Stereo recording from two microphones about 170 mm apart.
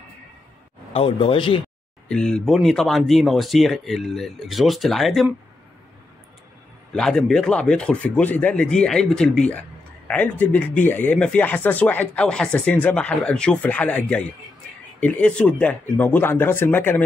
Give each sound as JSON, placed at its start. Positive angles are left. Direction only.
{"t": 0.9, "sound": "speech", "side_deg": 35}
{"t": 2.0, "sound": "speech", "side_deg": 5}
{"t": 6.9, "sound": "speech", "side_deg": 5}
{"t": 9.5, "sound": "a sound", "side_deg": 10}
{"t": 10.4, "sound": "speech", "side_deg": 10}